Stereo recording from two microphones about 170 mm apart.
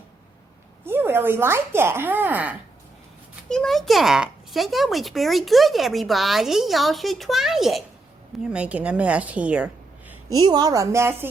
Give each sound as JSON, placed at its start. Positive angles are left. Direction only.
{"t": 0.9, "sound": "speech", "side_deg": -15}
{"t": 3.5, "sound": "a child's voice", "side_deg": 5}
{"t": 10.1, "sound": "a woman's voice", "side_deg": -20}